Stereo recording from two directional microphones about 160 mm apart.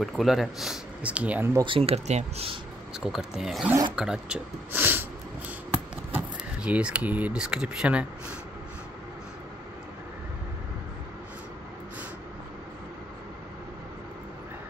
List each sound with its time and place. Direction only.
0.0 s speech: centre (ahead or behind)
1.6 s speech: 35° right (ahead or behind)
3.0 s speech: 5° right (ahead or behind)
5.7 s keys jangling: 10° right (ahead or behind)